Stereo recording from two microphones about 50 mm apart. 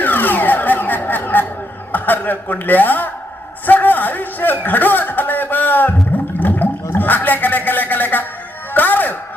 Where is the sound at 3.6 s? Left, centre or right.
Left.